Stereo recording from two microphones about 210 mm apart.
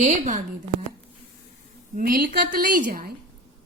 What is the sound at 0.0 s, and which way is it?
Speech, 35° right (ahead or behind).